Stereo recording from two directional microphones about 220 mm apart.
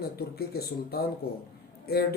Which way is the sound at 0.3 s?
45° left (ahead or behind).